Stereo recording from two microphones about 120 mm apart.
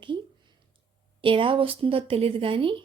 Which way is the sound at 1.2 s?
45° right (ahead or behind).